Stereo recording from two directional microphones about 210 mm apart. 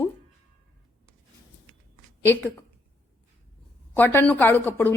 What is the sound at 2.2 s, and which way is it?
Speech, 10° left (ahead or behind).